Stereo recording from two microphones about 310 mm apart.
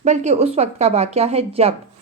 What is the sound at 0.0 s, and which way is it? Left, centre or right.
A woman's voice, right.